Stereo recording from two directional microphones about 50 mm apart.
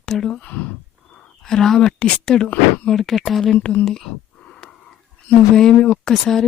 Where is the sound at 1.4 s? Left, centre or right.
Centre.